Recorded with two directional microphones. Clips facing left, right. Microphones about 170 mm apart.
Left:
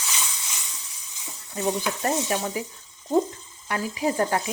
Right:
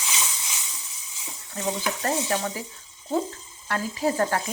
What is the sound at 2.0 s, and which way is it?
Speech, 15° left (ahead or behind).